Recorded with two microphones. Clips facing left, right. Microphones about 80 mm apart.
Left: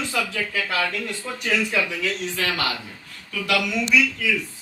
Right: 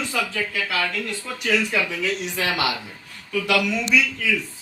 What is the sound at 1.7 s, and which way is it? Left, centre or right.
Speech, centre.